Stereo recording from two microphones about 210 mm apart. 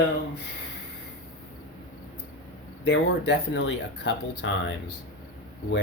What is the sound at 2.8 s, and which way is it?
Speech, 55° left (ahead or behind).